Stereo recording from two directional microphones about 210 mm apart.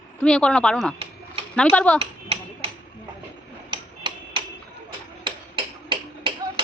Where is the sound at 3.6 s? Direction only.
25° right (ahead or behind).